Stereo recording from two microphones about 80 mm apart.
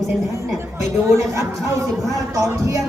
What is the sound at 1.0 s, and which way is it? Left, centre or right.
Speech, right.